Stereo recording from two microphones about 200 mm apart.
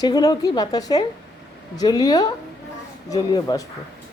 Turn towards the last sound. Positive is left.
turn(degrees=20)  # may be behind; listen again after turning